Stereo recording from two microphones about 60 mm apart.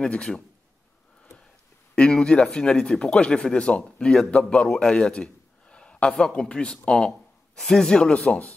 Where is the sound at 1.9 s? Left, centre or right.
Centre.